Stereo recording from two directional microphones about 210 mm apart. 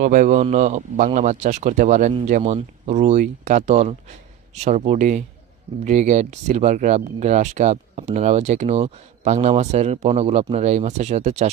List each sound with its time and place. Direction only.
0.0 s speech: 40° right (ahead or behind)